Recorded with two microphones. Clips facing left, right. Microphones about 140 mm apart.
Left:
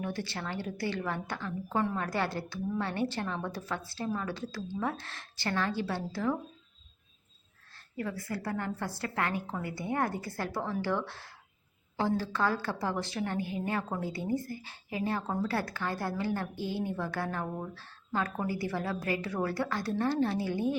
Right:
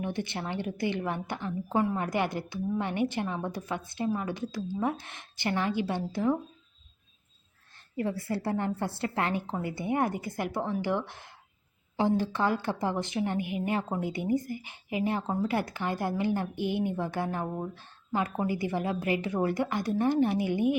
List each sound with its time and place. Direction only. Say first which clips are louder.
0.0 s a woman's voice: right 3 dB; 20° right (ahead or behind)
7.9 s a woman's voice: right 5 dB; 25° right (ahead or behind)